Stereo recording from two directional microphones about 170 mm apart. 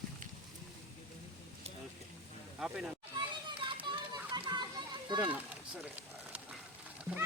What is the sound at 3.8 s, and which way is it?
Children playing, 25° right (ahead or behind).